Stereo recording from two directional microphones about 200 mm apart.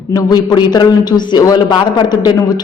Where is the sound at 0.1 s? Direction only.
20° left (ahead or behind).